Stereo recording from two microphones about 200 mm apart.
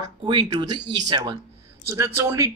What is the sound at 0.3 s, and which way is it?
Speech, 25° right (ahead or behind).